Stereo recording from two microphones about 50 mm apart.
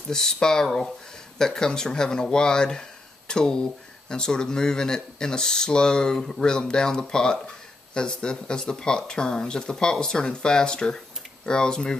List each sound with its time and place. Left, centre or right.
0.1 s speech: centre